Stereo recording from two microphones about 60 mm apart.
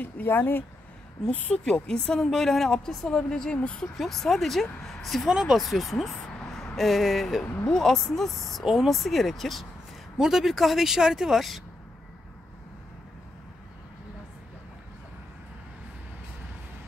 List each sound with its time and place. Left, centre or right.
0.0 s speech: left
1.6 s a woman's voice: centre
5.3 s speech: centre
5.6 s speech: centre
6.2 s vehicle: centre
7.7 s speech: centre